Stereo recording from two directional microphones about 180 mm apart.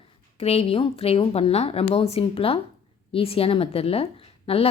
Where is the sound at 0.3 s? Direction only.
35° left (ahead or behind).